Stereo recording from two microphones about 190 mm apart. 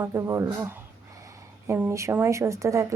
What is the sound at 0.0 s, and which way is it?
A woman's voice, 15° right (ahead or behind).